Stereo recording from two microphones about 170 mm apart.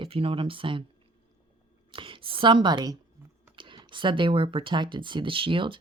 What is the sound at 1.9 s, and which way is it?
Speech, 30° right (ahead or behind).